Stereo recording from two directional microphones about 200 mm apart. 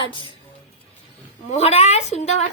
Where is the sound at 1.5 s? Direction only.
30° left (ahead or behind).